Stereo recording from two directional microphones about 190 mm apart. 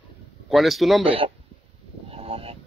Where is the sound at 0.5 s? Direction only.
Centre (ahead or behind).